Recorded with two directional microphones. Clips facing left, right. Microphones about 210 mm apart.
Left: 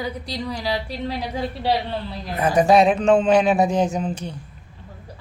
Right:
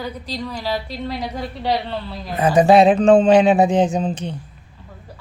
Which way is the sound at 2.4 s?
25° right (ahead or behind).